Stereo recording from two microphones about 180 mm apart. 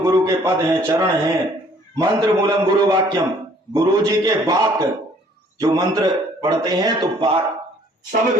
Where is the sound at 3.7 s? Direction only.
20° right (ahead or behind).